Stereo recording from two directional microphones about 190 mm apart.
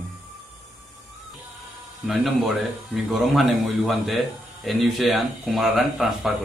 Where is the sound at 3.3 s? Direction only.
Centre (ahead or behind).